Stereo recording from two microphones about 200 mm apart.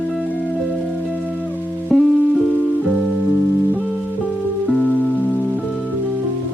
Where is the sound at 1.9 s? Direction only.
5° left (ahead or behind).